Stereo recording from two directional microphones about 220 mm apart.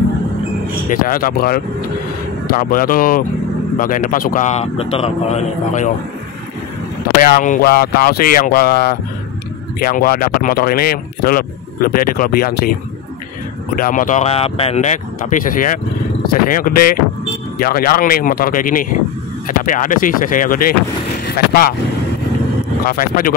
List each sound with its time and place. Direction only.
0.8 s speech: 40° left (ahead or behind)
7.2 s speech: 35° left (ahead or behind)
13.7 s speech: 40° left (ahead or behind)
22.8 s speech: 40° left (ahead or behind)